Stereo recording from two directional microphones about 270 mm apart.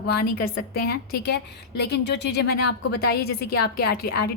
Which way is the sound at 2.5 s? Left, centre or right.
Left.